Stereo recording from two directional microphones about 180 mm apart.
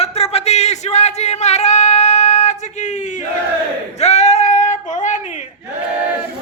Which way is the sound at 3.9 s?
40° left (ahead or behind).